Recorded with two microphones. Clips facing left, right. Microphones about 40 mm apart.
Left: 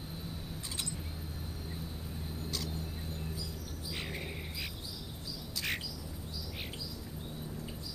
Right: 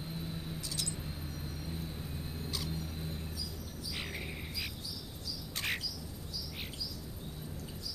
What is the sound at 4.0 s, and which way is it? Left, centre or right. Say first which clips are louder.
Cricket: even; centre.